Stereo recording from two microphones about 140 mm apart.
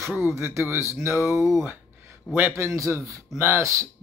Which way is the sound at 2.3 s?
15° right (ahead or behind).